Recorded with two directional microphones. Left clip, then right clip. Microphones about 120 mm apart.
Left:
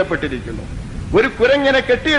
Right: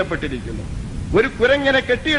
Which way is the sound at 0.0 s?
35° left (ahead or behind).